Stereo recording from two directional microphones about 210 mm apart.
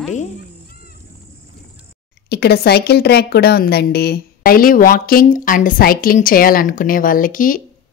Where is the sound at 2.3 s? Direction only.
50° left (ahead or behind).